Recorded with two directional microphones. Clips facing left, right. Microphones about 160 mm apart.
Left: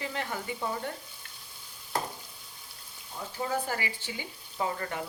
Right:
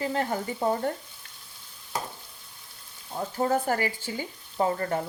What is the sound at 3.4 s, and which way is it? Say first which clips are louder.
Speech: right 7 dB; 45° right (ahead or behind).